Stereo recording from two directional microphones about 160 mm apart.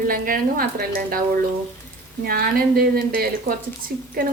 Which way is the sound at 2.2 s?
70° right (ahead or behind).